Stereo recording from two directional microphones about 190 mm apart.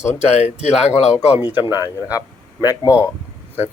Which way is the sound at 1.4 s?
10° right (ahead or behind).